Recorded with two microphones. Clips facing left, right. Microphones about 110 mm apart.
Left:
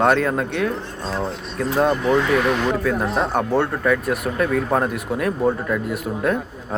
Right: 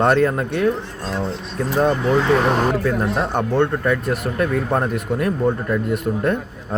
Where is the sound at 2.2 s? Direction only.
30° right (ahead or behind).